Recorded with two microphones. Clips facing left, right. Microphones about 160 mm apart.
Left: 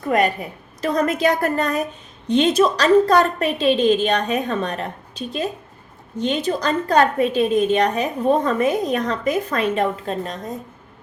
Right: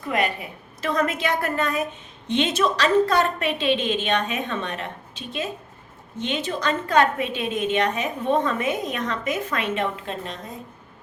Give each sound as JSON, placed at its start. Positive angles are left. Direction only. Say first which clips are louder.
{"t": 0.1, "sound": "a woman's voice", "louder": "left 6 dB", "side_deg": 45}